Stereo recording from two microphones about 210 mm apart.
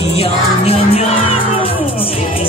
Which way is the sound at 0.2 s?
30° left (ahead or behind).